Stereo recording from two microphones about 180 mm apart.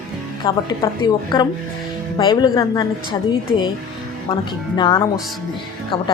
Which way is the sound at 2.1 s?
25° left (ahead or behind).